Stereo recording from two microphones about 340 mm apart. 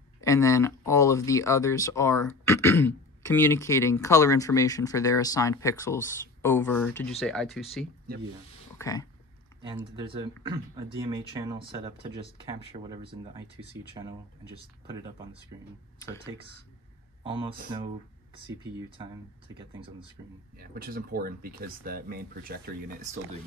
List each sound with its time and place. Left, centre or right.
0.2 s speech: centre
8.7 s speech: centre
9.8 s speech: centre
17.2 s speech: centre
20.5 s speech: right